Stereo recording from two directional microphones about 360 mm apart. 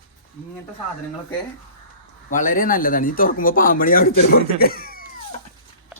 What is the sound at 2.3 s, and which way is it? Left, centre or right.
Speech, left.